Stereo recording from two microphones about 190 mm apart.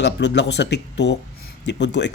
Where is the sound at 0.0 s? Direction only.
65° left (ahead or behind).